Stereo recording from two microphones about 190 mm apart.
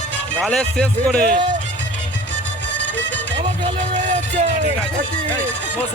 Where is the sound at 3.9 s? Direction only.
40° right (ahead or behind).